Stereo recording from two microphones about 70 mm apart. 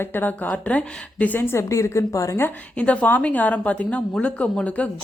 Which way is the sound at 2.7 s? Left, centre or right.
Centre.